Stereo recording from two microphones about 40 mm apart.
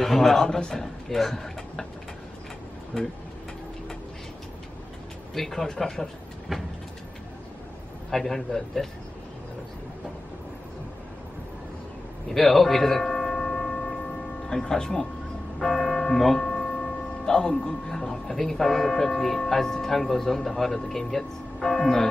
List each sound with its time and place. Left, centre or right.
0.0 s speech: centre
0.6 s a man's voice: left
1.1 s speech: centre
5.3 s speech: centre
6.5 s vehicle: centre
8.1 s speech: centre
12.3 s tuning fork: centre
14.5 s speech: centre
15.6 s church bell: centre
17.2 s speech: centre